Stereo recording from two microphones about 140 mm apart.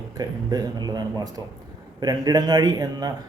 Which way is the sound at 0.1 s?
25° right (ahead or behind).